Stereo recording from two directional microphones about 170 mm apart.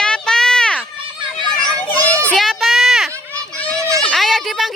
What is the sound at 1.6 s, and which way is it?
Children playing, 5° left (ahead or behind).